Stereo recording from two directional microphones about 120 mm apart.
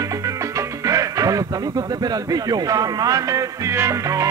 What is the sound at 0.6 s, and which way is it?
Music, 30° right (ahead or behind).